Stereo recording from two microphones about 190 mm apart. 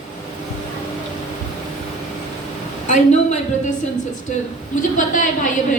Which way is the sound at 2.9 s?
40° left (ahead or behind).